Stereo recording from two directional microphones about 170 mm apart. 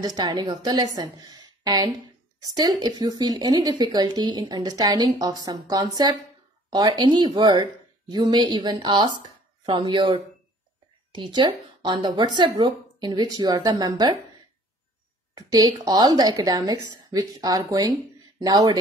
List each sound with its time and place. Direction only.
0.0 s speech: 25° right (ahead or behind)
15.3 s speech: 20° right (ahead or behind)